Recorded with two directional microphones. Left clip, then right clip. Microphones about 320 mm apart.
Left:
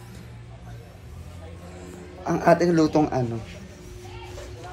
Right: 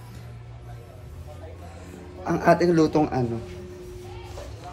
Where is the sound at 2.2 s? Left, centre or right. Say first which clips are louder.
Even; centre.